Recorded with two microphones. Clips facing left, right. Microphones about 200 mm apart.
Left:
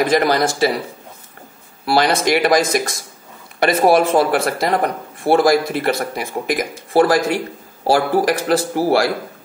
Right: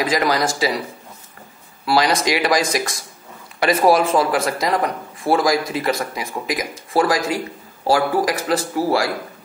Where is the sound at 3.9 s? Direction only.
60° left (ahead or behind).